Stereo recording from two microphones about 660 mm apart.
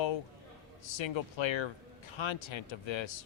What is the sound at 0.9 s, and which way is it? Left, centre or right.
A man's voice, left.